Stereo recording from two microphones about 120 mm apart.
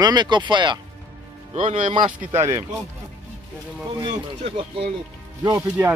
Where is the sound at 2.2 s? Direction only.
20° right (ahead or behind).